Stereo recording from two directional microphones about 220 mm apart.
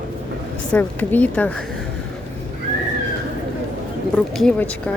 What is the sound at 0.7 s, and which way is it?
Speech, 10° left (ahead or behind).